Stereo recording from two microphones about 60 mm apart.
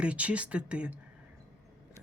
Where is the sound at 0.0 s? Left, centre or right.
Right.